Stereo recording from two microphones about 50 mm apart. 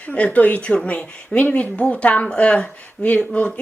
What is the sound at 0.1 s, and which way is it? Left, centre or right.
Speech, left.